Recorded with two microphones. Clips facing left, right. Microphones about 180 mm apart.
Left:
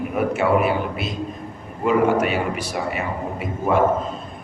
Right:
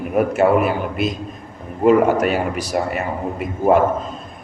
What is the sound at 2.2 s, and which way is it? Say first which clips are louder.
Speech: right 3 dB; 40° right (ahead or behind).